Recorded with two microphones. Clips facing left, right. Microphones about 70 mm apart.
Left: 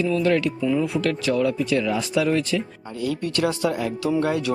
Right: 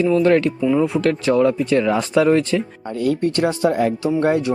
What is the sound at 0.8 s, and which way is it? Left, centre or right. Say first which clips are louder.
Speech: right 5 dB; right.